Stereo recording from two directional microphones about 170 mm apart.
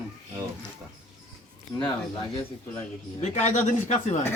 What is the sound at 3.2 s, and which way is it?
Speech, 45° left (ahead or behind).